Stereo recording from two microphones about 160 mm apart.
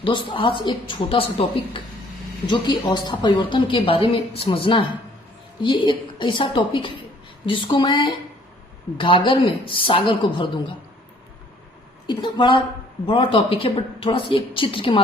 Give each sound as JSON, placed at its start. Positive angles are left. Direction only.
{"t": 0.0, "sound": "a woman's voice", "side_deg": 30}
{"t": 12.0, "sound": "a woman's voice", "side_deg": 30}